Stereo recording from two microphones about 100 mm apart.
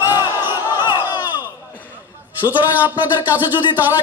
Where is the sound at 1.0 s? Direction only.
15° right (ahead or behind).